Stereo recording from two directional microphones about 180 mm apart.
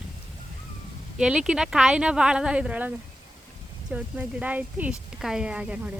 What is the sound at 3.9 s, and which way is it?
Speech, 10° right (ahead or behind).